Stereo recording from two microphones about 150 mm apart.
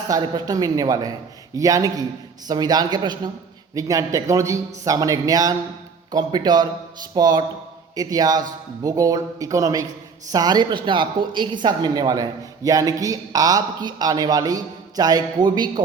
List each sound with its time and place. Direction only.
0.1 s a woman's voice: 25° right (ahead or behind)